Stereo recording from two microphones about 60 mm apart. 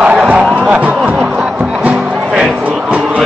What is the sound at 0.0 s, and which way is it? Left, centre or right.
Music, right.